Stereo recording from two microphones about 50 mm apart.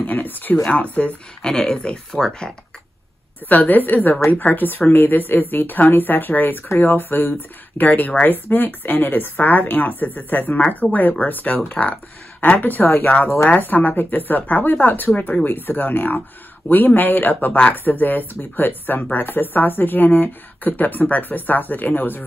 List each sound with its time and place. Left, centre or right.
0.0 s speech: left
1.0 s speech: left
3.4 s speech: left